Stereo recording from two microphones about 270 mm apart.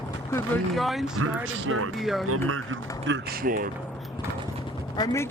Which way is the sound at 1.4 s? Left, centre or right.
Right.